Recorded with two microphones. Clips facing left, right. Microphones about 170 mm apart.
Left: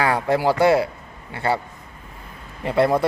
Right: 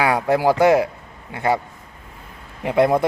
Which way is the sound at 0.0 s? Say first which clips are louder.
Right 2 dB; 15° right (ahead or behind).